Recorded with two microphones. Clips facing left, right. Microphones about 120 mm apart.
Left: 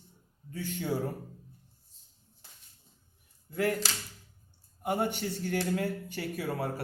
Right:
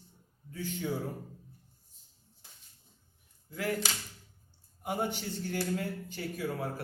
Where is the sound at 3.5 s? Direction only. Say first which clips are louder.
Left 5 dB; 50° left (ahead or behind).